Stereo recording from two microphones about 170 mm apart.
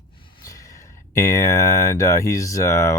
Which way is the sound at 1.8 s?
15° left (ahead or behind).